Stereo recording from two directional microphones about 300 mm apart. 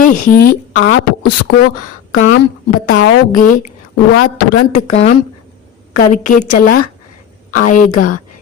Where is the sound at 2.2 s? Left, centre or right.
Left.